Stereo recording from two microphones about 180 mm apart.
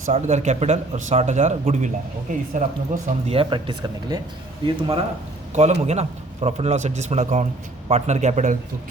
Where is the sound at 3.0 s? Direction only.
30° right (ahead or behind).